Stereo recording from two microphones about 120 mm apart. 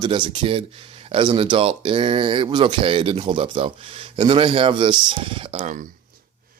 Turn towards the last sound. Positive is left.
turn(degrees=-90)